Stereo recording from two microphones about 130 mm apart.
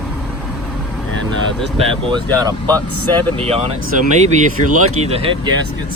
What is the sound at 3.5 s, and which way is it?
Speech, 50° right (ahead or behind).